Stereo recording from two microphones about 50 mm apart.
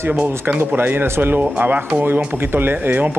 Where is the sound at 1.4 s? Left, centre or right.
Right.